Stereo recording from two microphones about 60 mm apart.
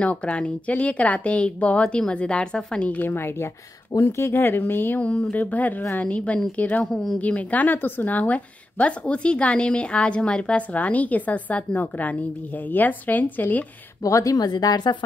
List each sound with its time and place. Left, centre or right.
0.0 s a woman's voice: centre
2.9 s speech: left
5.0 s a woman's voice: centre
6.9 s speech: centre
7.2 s a woman's voice: left
14.0 s a woman's voice: left